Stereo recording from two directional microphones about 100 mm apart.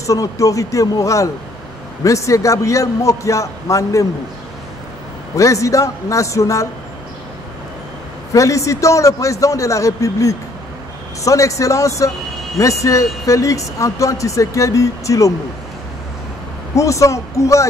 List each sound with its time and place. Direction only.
0.0 s speech: 35° left (ahead or behind)
5.3 s speech: 30° left (ahead or behind)
8.3 s speech: 30° left (ahead or behind)
16.7 s speech: 30° left (ahead or behind)